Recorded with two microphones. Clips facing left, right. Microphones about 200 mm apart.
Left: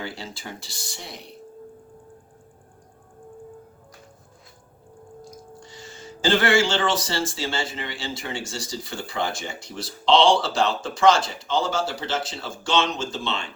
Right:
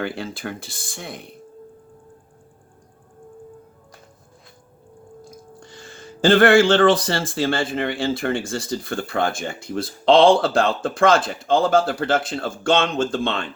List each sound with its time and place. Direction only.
0.0 s speech: 55° right (ahead or behind)
5.6 s speech: 55° right (ahead or behind)